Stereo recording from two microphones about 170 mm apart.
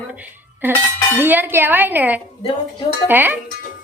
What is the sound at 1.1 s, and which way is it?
A woman's voice, 10° right (ahead or behind).